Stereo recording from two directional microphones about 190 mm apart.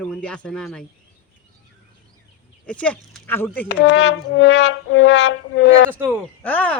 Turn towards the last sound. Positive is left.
turn(degrees=10)  # may be behind; listen again after turning